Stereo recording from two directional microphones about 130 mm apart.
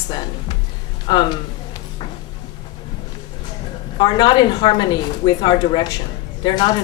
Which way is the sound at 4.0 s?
35° left (ahead or behind).